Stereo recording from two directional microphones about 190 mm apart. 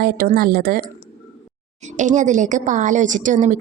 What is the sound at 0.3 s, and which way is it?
Speech, 50° right (ahead or behind).